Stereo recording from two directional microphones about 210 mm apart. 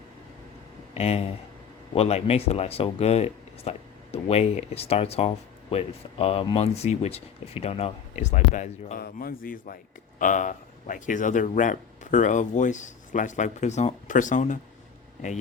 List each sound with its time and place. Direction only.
0.9 s speech: 30° left (ahead or behind)